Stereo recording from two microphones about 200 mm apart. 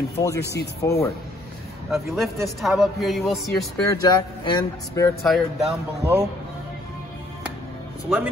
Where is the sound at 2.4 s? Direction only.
Centre (ahead or behind).